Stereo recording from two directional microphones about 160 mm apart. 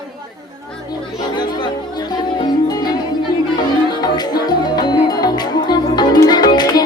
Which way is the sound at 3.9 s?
25° left (ahead or behind).